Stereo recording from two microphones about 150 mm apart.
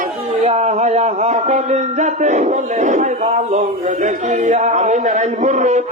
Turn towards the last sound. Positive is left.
turn(degrees=-50)  # may be behind; listen again after turning